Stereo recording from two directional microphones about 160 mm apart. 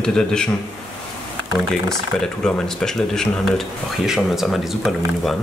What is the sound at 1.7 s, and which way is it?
Speech, 5° left (ahead or behind).